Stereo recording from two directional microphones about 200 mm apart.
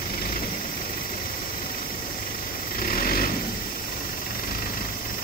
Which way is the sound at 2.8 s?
45° left (ahead or behind).